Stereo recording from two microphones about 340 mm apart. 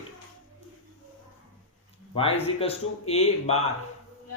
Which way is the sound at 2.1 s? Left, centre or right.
Centre.